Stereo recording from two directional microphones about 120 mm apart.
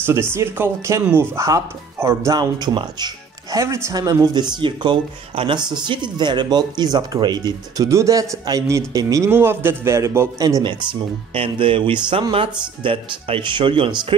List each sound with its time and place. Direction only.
0.0 s a man's voice: 20° right (ahead or behind)
2.3 s speech: 35° right (ahead or behind)
3.5 s a man's voice: 25° right (ahead or behind)
10.6 s speech: 40° right (ahead or behind)